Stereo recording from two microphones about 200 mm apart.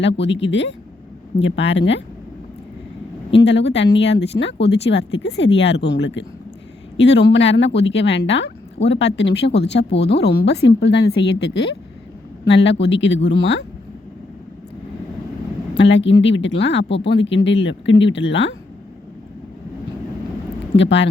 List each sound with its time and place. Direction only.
0.0 s speech: 65° left (ahead or behind)
3.4 s speech: 60° left (ahead or behind)
15.7 s speech: 65° left (ahead or behind)
20.7 s speech: 65° left (ahead or behind)